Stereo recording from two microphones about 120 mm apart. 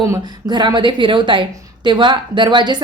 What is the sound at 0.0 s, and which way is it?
Speech, 30° right (ahead or behind).